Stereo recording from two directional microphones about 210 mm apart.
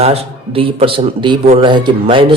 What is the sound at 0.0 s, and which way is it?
A man's voice, 30° right (ahead or behind).